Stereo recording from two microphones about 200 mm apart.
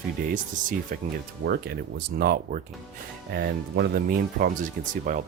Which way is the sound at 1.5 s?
50° right (ahead or behind).